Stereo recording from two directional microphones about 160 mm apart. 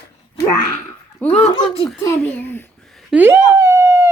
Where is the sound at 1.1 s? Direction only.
5° left (ahead or behind).